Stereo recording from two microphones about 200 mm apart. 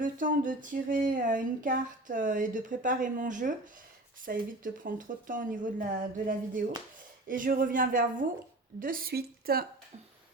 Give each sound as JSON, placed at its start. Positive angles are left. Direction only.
{"t": 0.0, "sound": "speech", "side_deg": -40}